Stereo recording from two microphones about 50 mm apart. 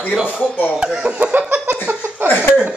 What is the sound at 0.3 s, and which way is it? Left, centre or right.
Speech, left.